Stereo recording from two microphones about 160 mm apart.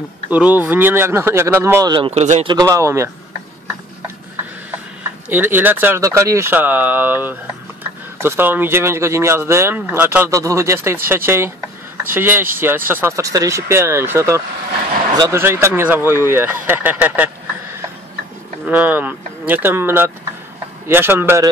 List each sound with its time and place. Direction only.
0.3 s speech: 10° right (ahead or behind)
2.0 s a man's voice: 45° right (ahead or behind)
2.4 s a man's voice: 25° right (ahead or behind)
5.3 s speech: 10° right (ahead or behind)
18.7 s speech: 10° right (ahead or behind)